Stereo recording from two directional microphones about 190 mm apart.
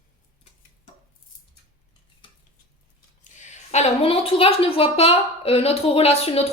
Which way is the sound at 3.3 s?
40° left (ahead or behind).